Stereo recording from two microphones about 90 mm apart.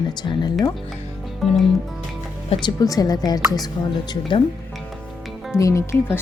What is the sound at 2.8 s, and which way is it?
Speech, 45° left (ahead or behind).